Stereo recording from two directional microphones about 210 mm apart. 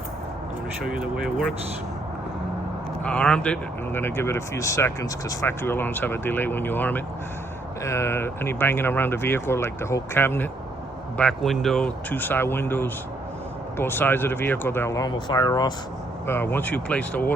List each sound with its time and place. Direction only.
3.0 s speech: 5° left (ahead or behind)